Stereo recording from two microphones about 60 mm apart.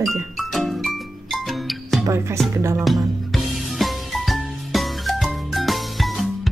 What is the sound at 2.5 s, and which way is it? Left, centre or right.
Music, right.